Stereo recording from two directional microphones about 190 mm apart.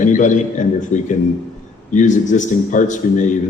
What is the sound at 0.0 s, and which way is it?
A man's voice, 40° left (ahead or behind).